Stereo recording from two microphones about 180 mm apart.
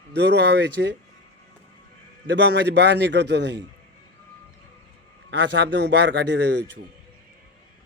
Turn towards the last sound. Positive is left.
turn(degrees=-75)  # may be behind; listen again after turning